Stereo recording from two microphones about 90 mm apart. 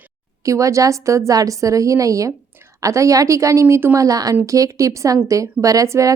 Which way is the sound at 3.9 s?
40° right (ahead or behind).